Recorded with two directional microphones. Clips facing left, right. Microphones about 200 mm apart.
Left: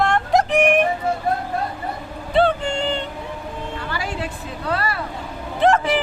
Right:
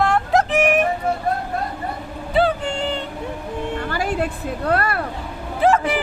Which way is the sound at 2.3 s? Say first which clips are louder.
Left 1 dB; 5° right (ahead or behind).